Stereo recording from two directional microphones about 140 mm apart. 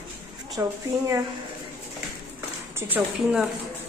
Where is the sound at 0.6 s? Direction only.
25° right (ahead or behind).